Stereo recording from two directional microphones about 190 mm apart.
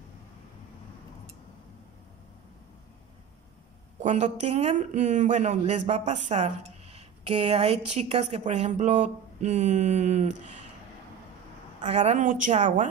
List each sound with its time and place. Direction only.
4.0 s speech: 40° right (ahead or behind)
11.8 s speech: 35° right (ahead or behind)